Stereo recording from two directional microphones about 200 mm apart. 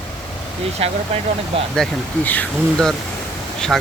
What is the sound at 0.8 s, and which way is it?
Speech, 30° right (ahead or behind).